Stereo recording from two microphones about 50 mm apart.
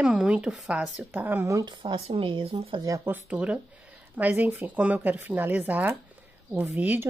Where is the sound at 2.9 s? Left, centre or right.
Right.